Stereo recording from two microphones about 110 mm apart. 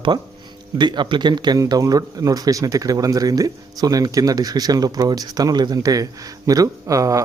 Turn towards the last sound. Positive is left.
turn(degrees=-30)  # may be behind; listen again after turning